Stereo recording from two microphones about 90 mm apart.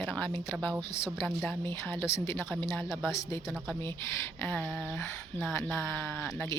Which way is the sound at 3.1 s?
35° left (ahead or behind).